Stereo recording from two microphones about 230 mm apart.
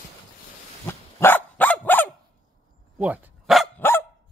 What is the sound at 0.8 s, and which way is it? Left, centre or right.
Dog, centre.